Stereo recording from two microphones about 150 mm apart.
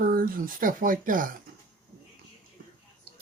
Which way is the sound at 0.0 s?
70° right (ahead or behind).